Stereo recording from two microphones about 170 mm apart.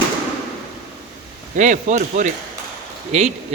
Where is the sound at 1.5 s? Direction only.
45° right (ahead or behind).